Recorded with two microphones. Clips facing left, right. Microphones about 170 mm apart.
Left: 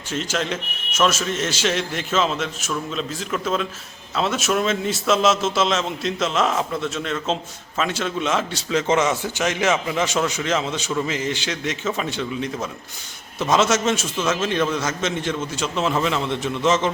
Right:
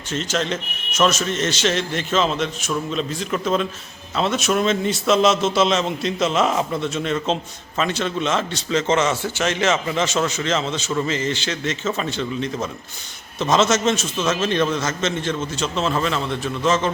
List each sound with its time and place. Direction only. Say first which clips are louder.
0.1 s a man's voice: right 1 dB; 10° left (ahead or behind)